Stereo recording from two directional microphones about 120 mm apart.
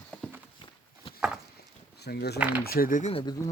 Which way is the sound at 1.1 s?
50° left (ahead or behind).